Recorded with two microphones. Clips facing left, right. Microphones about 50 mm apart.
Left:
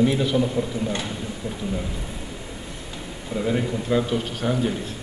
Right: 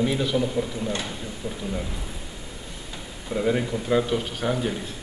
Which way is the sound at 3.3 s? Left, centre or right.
Centre.